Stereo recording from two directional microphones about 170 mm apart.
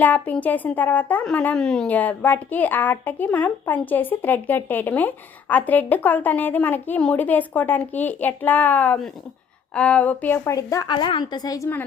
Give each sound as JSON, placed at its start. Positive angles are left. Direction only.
{"t": 0.0, "sound": "speech", "side_deg": 10}